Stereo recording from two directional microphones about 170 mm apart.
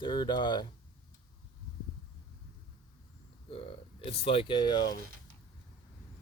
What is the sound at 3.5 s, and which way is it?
Speech, 35° left (ahead or behind).